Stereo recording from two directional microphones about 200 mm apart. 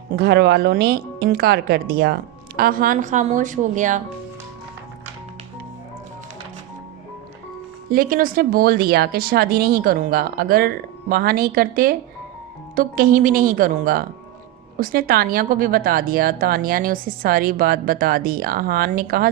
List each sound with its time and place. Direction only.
0.2 s speech: 55° right (ahead or behind); by 4.0 s 40° right (ahead or behind)
7.9 s speech: 45° right (ahead or behind)